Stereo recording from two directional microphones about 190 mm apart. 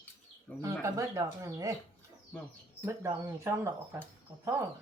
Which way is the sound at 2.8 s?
15° right (ahead or behind).